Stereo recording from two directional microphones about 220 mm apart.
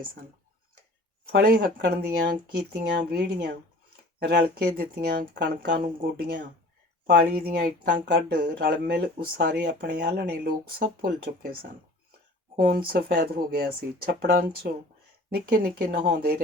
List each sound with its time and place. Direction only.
1.3 s speech: 45° right (ahead or behind)